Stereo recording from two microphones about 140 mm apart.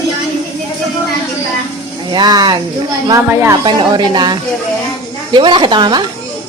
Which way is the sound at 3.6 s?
30° right (ahead or behind).